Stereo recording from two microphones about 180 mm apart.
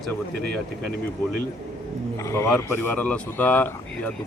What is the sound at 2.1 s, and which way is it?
Speech, 15° left (ahead or behind).